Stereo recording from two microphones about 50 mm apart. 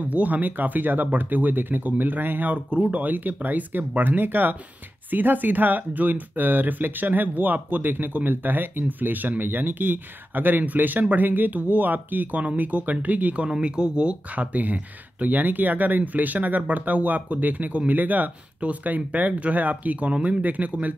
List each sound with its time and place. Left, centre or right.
0.0 s speech: right
13.5 s speech: centre